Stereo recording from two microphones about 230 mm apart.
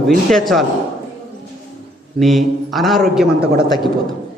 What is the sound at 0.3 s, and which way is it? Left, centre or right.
Speech, centre.